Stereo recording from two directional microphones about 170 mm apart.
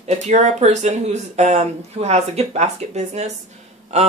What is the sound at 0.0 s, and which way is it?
Speech, 45° right (ahead or behind).